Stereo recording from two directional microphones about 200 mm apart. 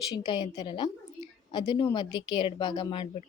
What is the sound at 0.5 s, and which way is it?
Speech, 25° left (ahead or behind).